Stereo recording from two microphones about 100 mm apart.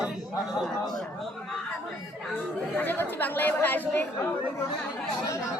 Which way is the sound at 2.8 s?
20° left (ahead or behind).